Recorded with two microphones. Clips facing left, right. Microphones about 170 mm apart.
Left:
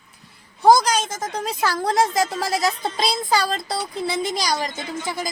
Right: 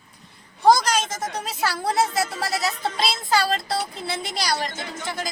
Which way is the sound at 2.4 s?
90° left.